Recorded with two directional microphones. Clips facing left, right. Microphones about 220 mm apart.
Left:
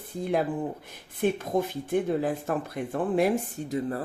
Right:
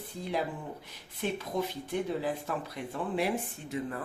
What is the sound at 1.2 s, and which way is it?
Speech, 50° left (ahead or behind).